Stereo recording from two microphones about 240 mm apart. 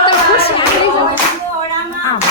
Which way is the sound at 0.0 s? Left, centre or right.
Left.